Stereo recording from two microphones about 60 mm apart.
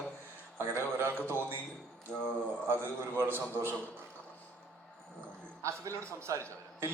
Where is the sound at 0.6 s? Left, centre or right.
Right.